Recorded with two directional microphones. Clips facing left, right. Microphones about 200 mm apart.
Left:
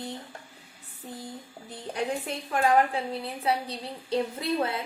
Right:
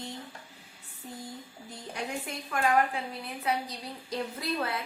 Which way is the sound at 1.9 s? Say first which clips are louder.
Left 6 dB; 30° left (ahead or behind).